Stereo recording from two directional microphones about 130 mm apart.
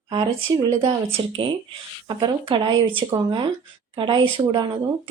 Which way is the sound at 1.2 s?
40° right (ahead or behind).